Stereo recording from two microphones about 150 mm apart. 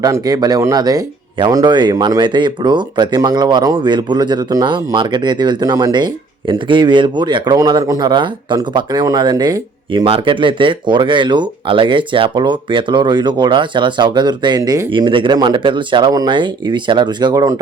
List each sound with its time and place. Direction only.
0.0 s speech: 25° right (ahead or behind)